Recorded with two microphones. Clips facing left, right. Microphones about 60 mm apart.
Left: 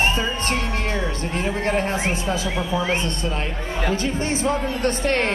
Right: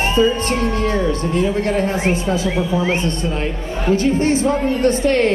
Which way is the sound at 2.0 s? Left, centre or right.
Right.